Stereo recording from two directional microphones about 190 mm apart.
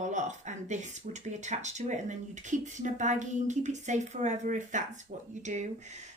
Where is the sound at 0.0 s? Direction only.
40° right (ahead or behind).